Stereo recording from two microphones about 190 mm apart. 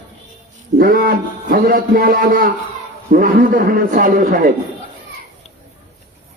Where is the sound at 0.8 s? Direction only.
50° right (ahead or behind).